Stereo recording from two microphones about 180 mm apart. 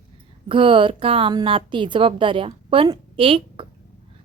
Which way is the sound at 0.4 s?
30° right (ahead or behind).